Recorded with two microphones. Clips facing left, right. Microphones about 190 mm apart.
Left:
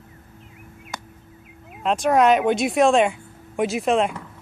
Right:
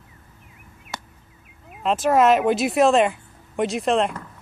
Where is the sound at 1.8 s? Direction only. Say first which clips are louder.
Even; centre (ahead or behind).